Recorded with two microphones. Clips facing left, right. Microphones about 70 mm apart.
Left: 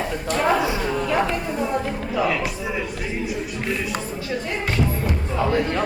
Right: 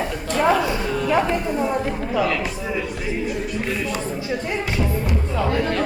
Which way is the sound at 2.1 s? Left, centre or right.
Centre.